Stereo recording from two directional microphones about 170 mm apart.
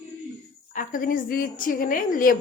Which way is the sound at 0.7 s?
50° left (ahead or behind).